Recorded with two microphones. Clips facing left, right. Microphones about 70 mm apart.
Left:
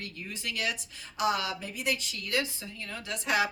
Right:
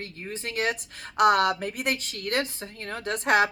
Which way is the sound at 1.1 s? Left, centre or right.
Right.